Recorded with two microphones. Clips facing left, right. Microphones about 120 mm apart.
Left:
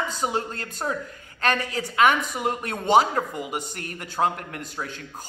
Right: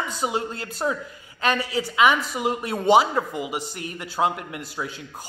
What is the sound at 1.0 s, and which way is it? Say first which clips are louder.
Speech: right 1 dB; 10° right (ahead or behind).